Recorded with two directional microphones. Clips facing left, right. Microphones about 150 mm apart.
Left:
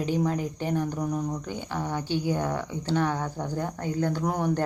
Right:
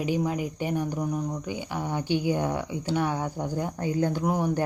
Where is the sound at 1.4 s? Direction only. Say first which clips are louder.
Even; 10° right (ahead or behind).